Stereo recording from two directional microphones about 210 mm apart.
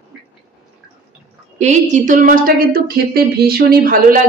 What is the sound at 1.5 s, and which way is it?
Speech, 35° right (ahead or behind).